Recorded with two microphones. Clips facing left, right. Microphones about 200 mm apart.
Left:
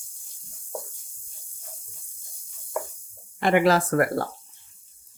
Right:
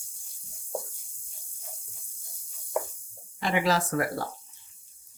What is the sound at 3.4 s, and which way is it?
Speech, 55° left (ahead or behind).